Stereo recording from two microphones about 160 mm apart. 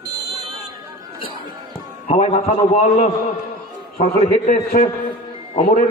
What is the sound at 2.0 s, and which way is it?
A man's voice, 40° left (ahead or behind).